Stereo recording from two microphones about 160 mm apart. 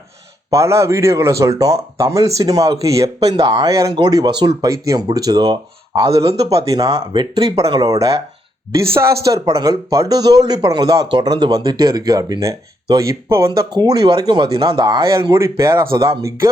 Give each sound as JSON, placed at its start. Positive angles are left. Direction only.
{"t": 0.5, "sound": "speech", "side_deg": -20}
{"t": 6.1, "sound": "speech", "side_deg": -40}
{"t": 6.7, "sound": "speech", "side_deg": -25}